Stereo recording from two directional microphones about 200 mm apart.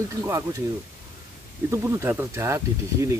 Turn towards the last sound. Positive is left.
turn(degrees=-15)  # may be behind; listen again after turning